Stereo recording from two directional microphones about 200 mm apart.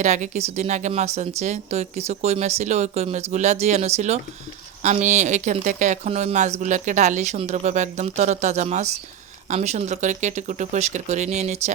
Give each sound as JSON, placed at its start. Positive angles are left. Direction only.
{"t": 0.0, "sound": "speech", "side_deg": -35}